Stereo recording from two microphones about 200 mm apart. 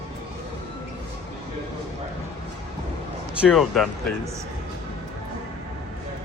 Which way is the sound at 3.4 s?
Centre (ahead or behind).